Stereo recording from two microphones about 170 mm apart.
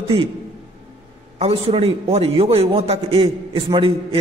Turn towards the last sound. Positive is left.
turn(degrees=-30)  # may be behind; listen again after turning